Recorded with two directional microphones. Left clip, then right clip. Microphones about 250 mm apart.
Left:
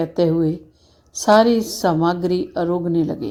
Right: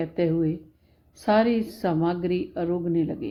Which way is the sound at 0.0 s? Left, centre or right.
Centre.